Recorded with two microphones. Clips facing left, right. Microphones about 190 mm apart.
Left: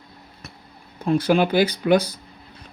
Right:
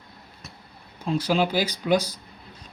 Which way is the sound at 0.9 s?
55° left (ahead or behind).